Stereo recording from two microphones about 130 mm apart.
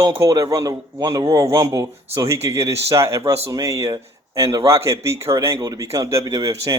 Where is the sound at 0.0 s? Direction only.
25° right (ahead or behind).